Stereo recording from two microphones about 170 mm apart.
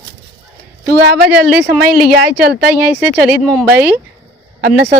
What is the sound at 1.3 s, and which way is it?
Speech, 75° right (ahead or behind).